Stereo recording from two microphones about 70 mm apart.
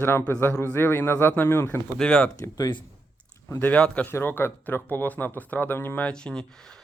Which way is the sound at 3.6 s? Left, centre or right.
Left.